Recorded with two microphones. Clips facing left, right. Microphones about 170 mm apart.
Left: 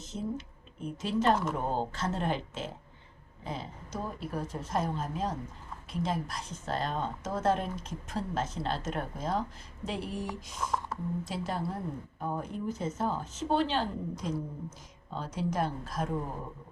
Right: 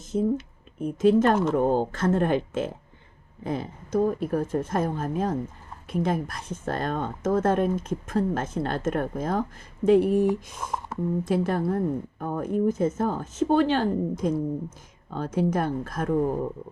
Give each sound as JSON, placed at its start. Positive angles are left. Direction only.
{"t": 0.0, "sound": "a woman's voice", "side_deg": -50}